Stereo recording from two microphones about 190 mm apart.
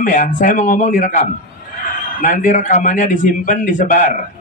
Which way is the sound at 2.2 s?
40° left (ahead or behind).